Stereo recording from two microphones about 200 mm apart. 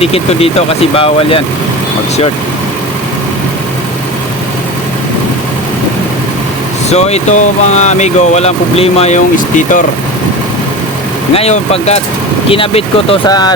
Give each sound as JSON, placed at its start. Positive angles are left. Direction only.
{"t": 0.0, "sound": "speech", "side_deg": 30}
{"t": 6.9, "sound": "speech", "side_deg": 35}
{"t": 11.3, "sound": "speech", "side_deg": 30}